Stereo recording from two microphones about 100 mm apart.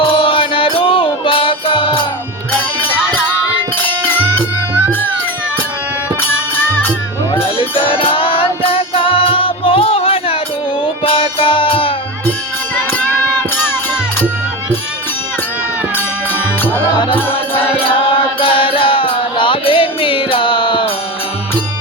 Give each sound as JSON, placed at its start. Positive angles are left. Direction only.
{"t": 0.0, "sound": "music", "side_deg": 65}
{"t": 2.6, "sound": "music", "side_deg": 15}
{"t": 7.4, "sound": "music", "side_deg": 60}
{"t": 17.5, "sound": "music", "side_deg": 60}